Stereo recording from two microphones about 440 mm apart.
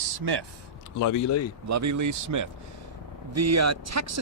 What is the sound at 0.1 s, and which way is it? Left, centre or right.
Speech, right.